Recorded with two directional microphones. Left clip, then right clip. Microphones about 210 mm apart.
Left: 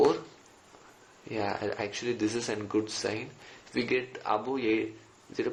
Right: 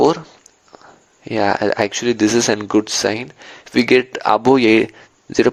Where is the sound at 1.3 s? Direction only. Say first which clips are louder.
Right 16 dB; 50° right (ahead or behind).